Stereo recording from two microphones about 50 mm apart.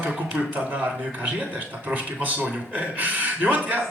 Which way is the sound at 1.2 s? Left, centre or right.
Right.